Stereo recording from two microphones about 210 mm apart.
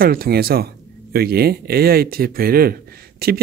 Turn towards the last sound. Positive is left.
turn(degrees=-45)  # may be behind; listen again after turning